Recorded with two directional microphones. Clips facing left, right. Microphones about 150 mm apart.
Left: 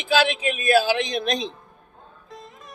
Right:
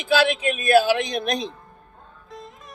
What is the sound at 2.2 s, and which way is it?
Music, centre (ahead or behind).